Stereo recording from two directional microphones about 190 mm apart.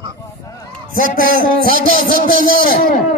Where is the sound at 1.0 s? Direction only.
50° right (ahead or behind).